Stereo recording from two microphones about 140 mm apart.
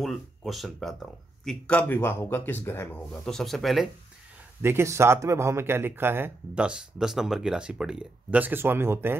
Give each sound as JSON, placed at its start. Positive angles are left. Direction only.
{"t": 0.0, "sound": "speech", "side_deg": 0}
{"t": 3.1, "sound": "speech", "side_deg": 5}
{"t": 4.6, "sound": "speech", "side_deg": -15}